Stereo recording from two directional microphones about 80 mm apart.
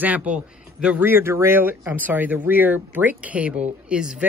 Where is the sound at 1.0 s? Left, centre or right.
Right; by 4.2 s centre.